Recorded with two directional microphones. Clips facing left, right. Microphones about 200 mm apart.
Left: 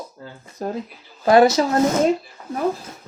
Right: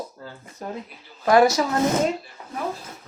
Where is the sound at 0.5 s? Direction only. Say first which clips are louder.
Left 6 dB; 35° left (ahead or behind).